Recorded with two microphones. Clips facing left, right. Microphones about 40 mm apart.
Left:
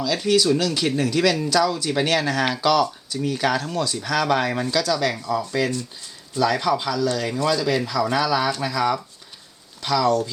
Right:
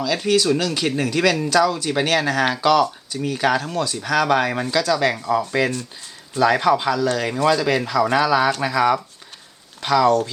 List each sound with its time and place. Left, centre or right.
0.0 s speech: centre